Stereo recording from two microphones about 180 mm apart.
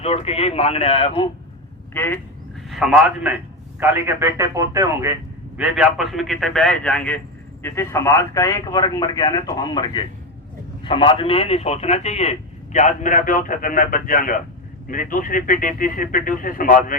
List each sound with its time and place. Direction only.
0.0 s a man's voice: 35° left (ahead or behind)
1.9 s speech: 10° left (ahead or behind)
2.6 s a man's voice: centre (ahead or behind)
5.5 s a man's voice: 5° right (ahead or behind); by 17.0 s 50° left (ahead or behind)